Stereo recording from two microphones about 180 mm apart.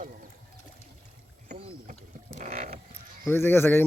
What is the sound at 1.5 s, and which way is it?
Rowboat, 35° right (ahead or behind).